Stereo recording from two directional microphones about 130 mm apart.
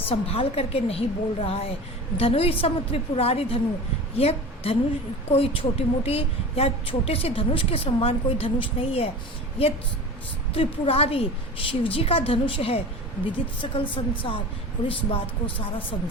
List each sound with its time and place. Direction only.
0.0 s a woman's voice: 45° left (ahead or behind)